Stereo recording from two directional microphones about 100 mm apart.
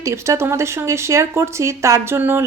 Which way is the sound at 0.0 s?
30° right (ahead or behind).